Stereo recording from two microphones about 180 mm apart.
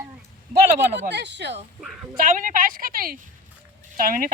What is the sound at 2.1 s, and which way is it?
A woman's voice, 50° right (ahead or behind).